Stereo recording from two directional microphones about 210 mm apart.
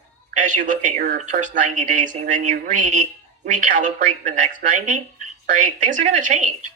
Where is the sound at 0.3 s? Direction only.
40° right (ahead or behind).